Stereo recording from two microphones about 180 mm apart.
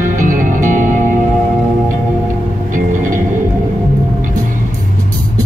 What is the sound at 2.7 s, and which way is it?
Music, 45° right (ahead or behind).